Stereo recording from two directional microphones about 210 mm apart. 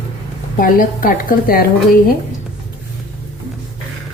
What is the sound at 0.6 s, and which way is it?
Speech, 40° left (ahead or behind).